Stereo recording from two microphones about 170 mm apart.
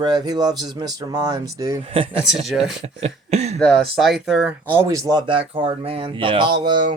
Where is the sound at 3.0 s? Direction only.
40° right (ahead or behind).